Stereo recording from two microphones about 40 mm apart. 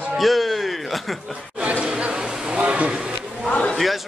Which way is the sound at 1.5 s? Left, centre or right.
Right.